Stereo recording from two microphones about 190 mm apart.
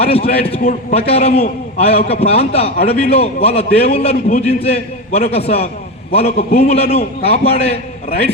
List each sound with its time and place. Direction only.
0.0 s a man's voice: 30° left (ahead or behind)
0.6 s a man's voice: 40° left (ahead or behind)